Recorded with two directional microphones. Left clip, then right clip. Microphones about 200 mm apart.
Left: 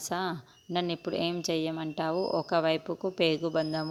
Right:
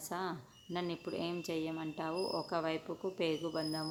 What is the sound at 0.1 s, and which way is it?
A woman's voice, 35° left (ahead or behind).